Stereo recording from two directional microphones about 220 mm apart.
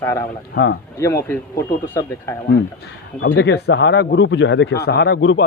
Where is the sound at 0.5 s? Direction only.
45° left (ahead or behind).